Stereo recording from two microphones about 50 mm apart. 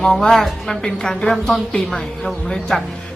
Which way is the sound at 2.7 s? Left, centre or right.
Centre.